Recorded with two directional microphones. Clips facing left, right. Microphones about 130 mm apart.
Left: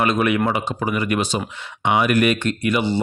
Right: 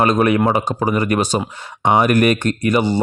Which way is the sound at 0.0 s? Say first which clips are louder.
Right 4 dB; 40° right (ahead or behind).